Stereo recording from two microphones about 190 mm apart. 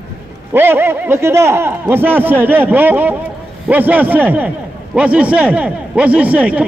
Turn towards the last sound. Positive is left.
turn(degrees=-5)  # may be behind; listen again after turning